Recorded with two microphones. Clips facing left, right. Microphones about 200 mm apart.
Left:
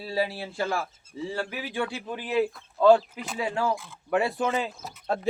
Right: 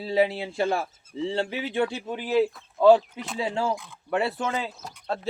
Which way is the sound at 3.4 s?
25° right (ahead or behind).